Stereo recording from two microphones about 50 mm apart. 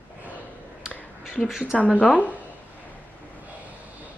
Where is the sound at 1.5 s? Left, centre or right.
Centre.